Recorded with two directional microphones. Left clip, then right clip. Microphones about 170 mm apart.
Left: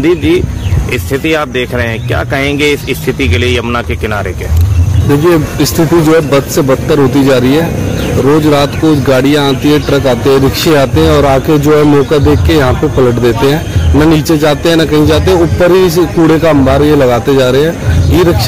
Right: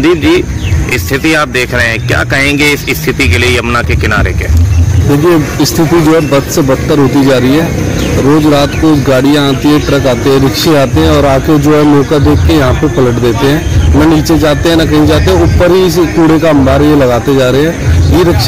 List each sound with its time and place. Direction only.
0.0 s speech: 5° right (ahead or behind)
5.3 s speech: 20° left (ahead or behind)